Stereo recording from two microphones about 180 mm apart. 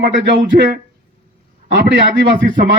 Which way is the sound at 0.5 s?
65° right (ahead or behind).